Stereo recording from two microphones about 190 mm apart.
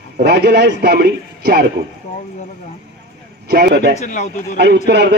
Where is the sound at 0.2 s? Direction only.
55° right (ahead or behind).